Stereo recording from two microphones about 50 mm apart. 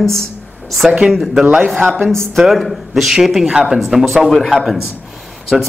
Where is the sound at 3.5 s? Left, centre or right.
Centre.